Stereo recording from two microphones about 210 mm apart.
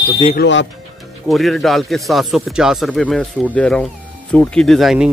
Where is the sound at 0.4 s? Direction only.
60° left (ahead or behind).